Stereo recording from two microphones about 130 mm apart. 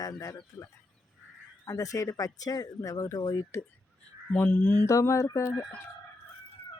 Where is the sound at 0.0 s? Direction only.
30° left (ahead or behind).